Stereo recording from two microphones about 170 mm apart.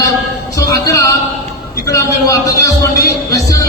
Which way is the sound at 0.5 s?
20° left (ahead or behind).